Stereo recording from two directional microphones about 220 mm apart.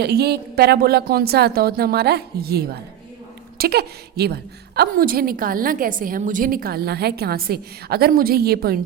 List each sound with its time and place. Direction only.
0.0 s a woman's voice: 45° right (ahead or behind)